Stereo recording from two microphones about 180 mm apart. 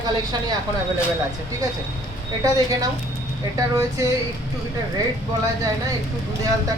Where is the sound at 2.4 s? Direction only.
20° right (ahead or behind).